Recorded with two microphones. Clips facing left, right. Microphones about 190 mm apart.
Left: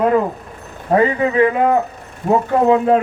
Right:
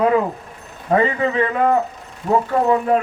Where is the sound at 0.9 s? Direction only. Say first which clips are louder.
Left 3 dB; 10° left (ahead or behind).